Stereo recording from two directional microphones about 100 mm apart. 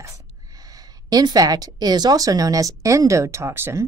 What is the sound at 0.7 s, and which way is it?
Speech, 40° right (ahead or behind).